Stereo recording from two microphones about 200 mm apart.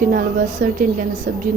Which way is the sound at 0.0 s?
45° right (ahead or behind).